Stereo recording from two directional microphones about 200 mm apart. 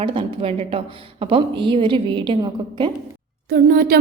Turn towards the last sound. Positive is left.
turn(degrees=-50)  # may be behind; listen again after turning